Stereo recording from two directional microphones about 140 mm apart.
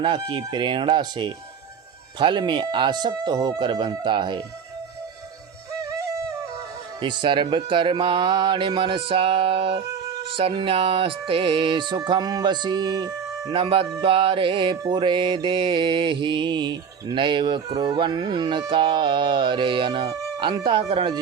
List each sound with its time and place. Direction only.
0.0 s mantra: 35° right (ahead or behind)
7.0 s mantra: 35° right (ahead or behind)
13.5 s mantra: 40° right (ahead or behind)